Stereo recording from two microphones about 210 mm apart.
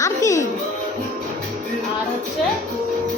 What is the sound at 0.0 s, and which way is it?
Music, 15° left (ahead or behind).